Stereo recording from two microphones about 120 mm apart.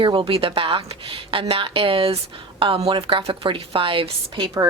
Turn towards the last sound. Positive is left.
turn(degrees=-45)  # may be behind; listen again after turning